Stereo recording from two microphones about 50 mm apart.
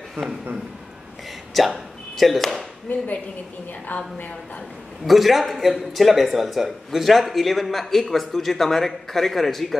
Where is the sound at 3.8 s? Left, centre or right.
Left.